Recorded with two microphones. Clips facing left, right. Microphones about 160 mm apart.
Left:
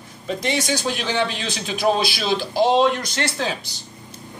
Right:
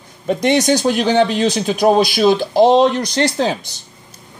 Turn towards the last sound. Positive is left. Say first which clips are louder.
# right 8 dB
turn(degrees=-35)  # may be behind; listen again after turning